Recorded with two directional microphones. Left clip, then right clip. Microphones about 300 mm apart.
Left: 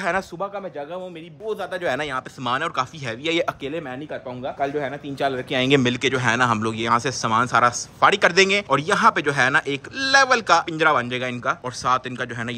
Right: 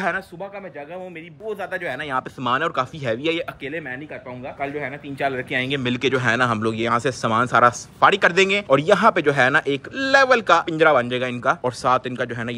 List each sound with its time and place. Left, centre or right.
1.5 s speech: centre
2.0 s speech: centre
3.3 s speech: centre
5.9 s speech: centre